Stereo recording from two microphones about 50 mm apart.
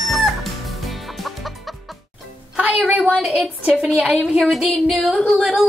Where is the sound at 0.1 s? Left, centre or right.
Centre.